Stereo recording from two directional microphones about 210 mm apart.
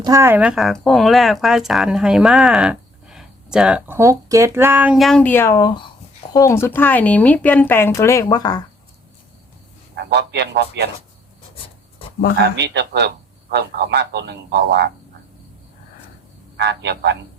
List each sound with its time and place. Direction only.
0.0 s speech: 15° right (ahead or behind); by 8.6 s 20° left (ahead or behind)
10.0 s a man's voice: 55° right (ahead or behind)
12.5 s a man's voice: 55° right (ahead or behind)
16.6 s a man's voice: 55° right (ahead or behind)